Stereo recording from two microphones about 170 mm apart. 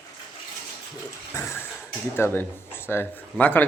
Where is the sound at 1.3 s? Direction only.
15° left (ahead or behind).